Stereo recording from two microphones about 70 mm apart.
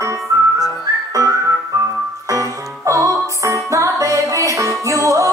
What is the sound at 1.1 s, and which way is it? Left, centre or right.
Music, right.